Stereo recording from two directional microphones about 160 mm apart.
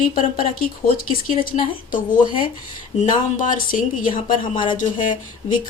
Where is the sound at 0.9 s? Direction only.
60° left (ahead or behind).